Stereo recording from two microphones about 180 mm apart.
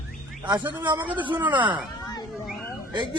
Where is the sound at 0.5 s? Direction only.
10° right (ahead or behind).